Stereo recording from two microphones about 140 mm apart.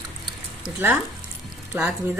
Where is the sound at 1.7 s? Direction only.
15° right (ahead or behind).